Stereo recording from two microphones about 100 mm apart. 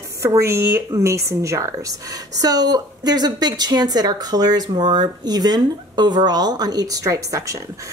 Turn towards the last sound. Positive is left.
turn(degrees=-30)  # may be behind; listen again after turning